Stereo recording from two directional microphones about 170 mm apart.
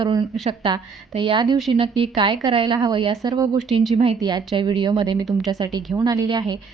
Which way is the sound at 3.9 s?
35° right (ahead or behind).